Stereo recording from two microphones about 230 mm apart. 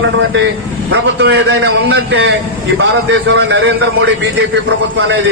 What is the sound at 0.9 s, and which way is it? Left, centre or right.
A man's voice, right.